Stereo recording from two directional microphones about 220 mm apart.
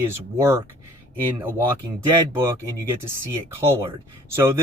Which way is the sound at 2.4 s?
15° right (ahead or behind).